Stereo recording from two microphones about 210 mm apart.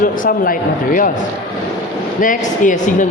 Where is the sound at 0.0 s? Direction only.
45° left (ahead or behind).